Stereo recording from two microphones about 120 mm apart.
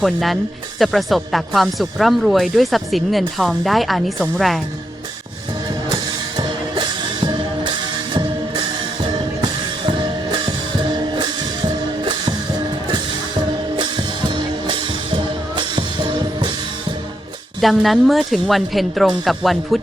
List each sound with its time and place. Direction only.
0.0 s speech: centre (ahead or behind)
5.9 s music: 40° right (ahead or behind)
17.6 s speech: centre (ahead or behind)